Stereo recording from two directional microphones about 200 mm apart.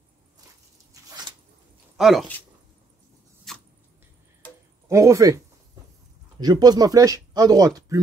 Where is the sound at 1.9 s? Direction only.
Centre (ahead or behind).